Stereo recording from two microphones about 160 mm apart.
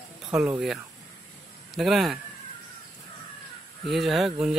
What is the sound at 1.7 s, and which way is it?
Speech, centre (ahead or behind).